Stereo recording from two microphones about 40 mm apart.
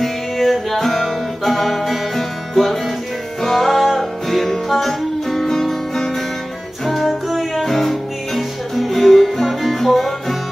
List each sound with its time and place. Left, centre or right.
0.0 s music: centre